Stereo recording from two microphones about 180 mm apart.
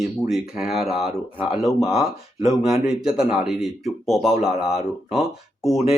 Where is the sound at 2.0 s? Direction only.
20° right (ahead or behind).